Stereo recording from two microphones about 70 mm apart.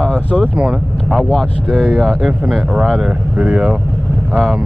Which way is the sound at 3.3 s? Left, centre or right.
Centre.